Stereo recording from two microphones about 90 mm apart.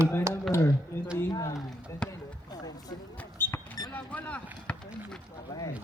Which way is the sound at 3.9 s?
15° left (ahead or behind).